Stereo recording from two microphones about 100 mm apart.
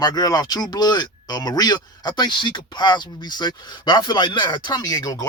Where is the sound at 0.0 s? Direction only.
40° left (ahead or behind).